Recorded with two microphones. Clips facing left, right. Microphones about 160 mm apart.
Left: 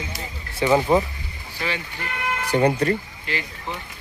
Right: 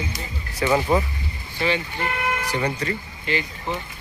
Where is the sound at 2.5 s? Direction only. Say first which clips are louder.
Left 11 dB; 50° left (ahead or behind).